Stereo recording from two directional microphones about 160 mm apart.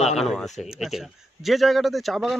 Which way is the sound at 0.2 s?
Centre (ahead or behind).